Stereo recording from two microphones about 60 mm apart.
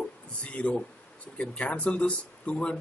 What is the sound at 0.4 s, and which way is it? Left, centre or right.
Speech, left.